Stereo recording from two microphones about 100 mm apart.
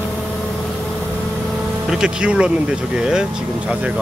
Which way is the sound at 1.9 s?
10° right (ahead or behind).